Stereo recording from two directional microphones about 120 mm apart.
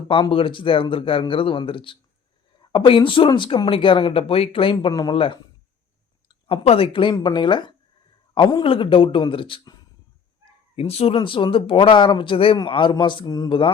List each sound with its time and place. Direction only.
0.1 s speech: 45° left (ahead or behind)
6.5 s a woman's voice: 50° left (ahead or behind)
10.8 s a woman's voice: 55° left (ahead or behind); by 13.7 s 40° left (ahead or behind)